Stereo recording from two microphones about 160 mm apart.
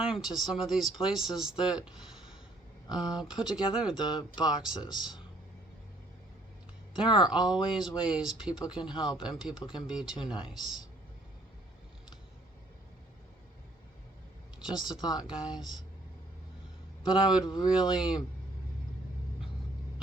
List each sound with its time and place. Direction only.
0.0 s speech: 5° right (ahead or behind)
4.8 s speech: 30° left (ahead or behind)
7.0 s speech: 5° right (ahead or behind)
8.9 s speech: 30° left (ahead or behind)
9.1 s speech: 5° right (ahead or behind)
14.6 s speech: 5° right (ahead or behind)
14.9 s speech: 25° left (ahead or behind)
15.2 s speech: 5° right (ahead or behind)
17.1 s speech: 5° right (ahead or behind)